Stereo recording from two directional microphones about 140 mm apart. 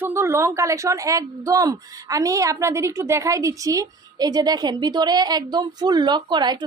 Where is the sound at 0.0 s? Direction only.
20° right (ahead or behind).